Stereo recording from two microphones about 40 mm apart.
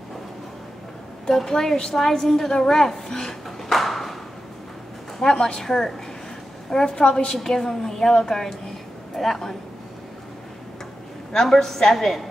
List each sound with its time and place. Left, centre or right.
1.3 s a woman's voice: centre
3.7 s a sound: centre
5.2 s a woman's voice: centre
7.3 s a woman's voice: centre
11.4 s a woman's voice: centre